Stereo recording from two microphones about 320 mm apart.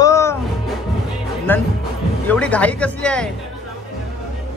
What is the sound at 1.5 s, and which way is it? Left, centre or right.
Speech, centre.